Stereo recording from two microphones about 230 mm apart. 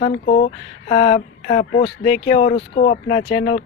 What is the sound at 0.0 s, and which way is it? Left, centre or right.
Speech, left.